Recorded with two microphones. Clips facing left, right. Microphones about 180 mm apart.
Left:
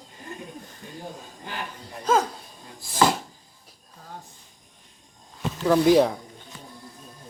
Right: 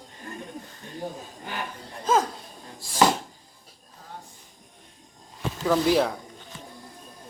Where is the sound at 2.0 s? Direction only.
Centre (ahead or behind).